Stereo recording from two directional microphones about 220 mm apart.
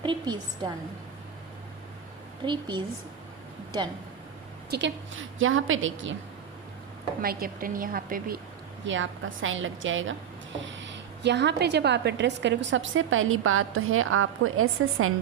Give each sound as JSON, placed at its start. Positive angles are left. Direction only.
{"t": 0.0, "sound": "a woman's voice", "side_deg": -20}
{"t": 2.4, "sound": "a woman's voice", "side_deg": -20}
{"t": 4.7, "sound": "a woman's voice", "side_deg": -55}
{"t": 7.2, "sound": "a woman's voice", "side_deg": -40}
{"t": 8.8, "sound": "a woman's voice", "side_deg": -60}